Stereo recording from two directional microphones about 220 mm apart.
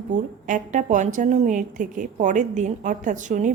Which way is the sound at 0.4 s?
35° right (ahead or behind).